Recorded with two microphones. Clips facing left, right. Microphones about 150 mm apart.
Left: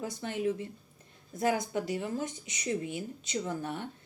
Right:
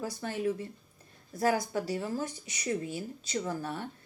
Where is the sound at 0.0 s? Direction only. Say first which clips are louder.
Even; 20° left (ahead or behind).